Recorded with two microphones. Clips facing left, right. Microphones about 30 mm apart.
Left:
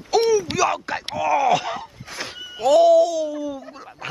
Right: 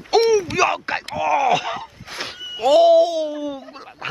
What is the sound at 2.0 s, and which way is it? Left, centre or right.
Speech, centre.